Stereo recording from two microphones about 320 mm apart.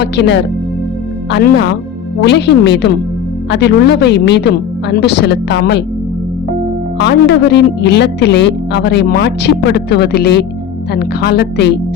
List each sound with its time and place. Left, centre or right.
0.0 s a woman's voice: left
7.0 s a woman's voice: left